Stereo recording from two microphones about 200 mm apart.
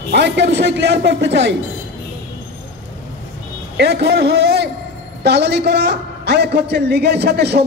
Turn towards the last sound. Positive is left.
turn(degrees=-55)  # may be behind; listen again after turning